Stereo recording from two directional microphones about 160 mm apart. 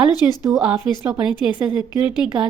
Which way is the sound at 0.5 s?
10° right (ahead or behind).